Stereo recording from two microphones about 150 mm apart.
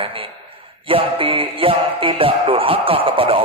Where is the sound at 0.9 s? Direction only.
35° right (ahead or behind).